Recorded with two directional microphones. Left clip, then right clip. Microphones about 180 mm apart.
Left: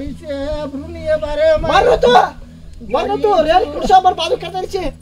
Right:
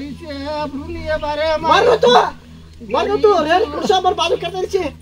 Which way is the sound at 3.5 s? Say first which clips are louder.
Left 4 dB; 20° left (ahead or behind).